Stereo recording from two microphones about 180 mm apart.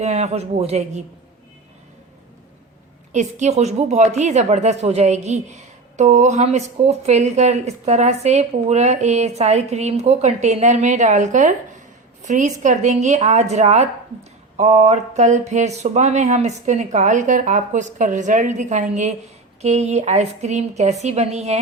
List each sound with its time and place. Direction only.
0.0 s speech: 35° right (ahead or behind)
3.1 s speech: 40° right (ahead or behind)